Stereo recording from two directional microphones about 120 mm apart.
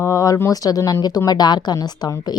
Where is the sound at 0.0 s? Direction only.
25° left (ahead or behind).